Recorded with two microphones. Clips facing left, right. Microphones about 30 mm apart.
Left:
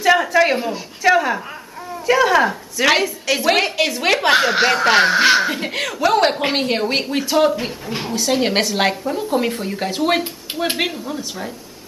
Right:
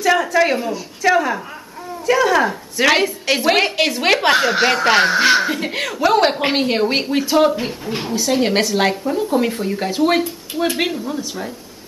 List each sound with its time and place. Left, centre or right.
0.0 s speech: centre
3.0 s a woman's voice: centre
4.3 s a woman's voice: centre